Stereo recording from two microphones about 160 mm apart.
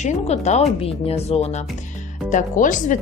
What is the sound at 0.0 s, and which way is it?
A woman's voice, 45° left (ahead or behind).